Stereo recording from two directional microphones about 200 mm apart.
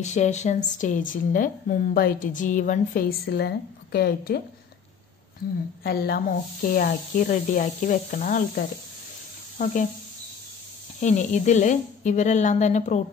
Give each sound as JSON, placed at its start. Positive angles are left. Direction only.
{"t": 0.0, "sound": "a woman's voice", "side_deg": 35}
{"t": 5.9, "sound": "a woman's voice", "side_deg": 50}
{"t": 11.0, "sound": "speech", "side_deg": 35}